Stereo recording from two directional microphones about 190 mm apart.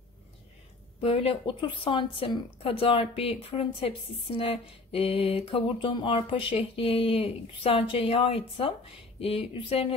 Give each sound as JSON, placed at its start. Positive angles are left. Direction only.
{"t": 1.0, "sound": "speech", "side_deg": 30}